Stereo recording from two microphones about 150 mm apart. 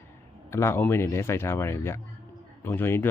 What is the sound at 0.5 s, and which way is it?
Speech, 15° left (ahead or behind).